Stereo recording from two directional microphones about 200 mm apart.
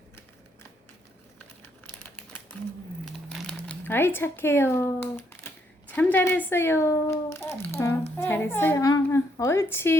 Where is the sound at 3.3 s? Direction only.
5° left (ahead or behind).